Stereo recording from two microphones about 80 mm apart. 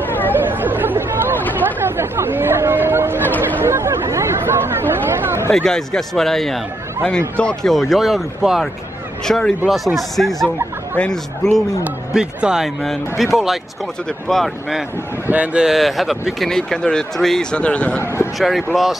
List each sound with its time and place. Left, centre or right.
0.0 s chatter: left
0.3 s chatter: right
3.2 s a sound: left
3.6 s chatter: right
5.5 s speech: centre
7.1 s speech: centre
7.7 s speech: centre
12.1 s a man's voice: centre
15.2 s speech: centre
15.6 s speech: centre
18.7 s speech: centre